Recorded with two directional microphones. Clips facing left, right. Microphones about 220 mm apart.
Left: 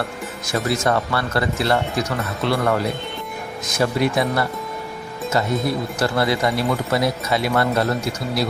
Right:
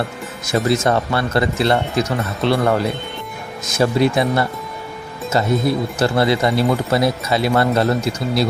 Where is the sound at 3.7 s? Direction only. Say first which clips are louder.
Right 4 dB; 25° right (ahead or behind).